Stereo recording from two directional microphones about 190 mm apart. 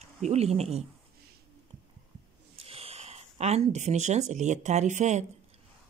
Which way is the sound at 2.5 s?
30° right (ahead or behind).